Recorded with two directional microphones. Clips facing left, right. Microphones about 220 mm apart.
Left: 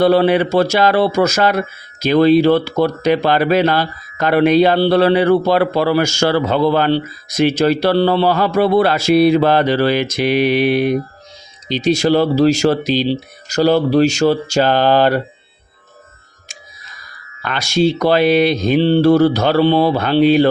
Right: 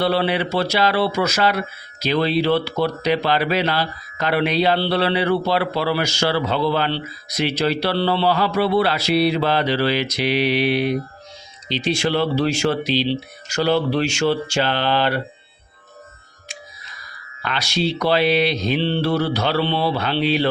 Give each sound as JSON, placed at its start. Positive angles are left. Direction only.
{"t": 0.0, "sound": "speech", "side_deg": 45}
{"t": 17.4, "sound": "speech", "side_deg": 50}